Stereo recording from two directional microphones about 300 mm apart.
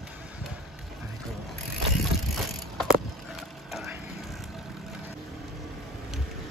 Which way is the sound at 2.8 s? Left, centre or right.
Centre.